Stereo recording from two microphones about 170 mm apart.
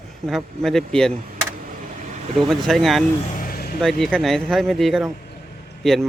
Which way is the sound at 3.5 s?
60° left (ahead or behind).